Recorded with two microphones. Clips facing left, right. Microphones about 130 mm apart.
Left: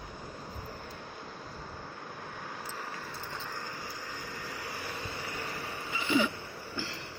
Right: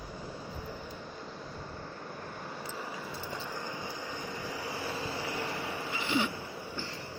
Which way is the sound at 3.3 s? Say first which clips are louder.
Right 3 dB; 20° right (ahead or behind).